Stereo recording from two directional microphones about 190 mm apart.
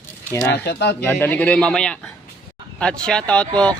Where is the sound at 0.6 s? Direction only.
60° left (ahead or behind).